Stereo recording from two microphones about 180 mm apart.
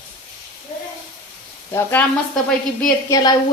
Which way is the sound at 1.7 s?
15° left (ahead or behind).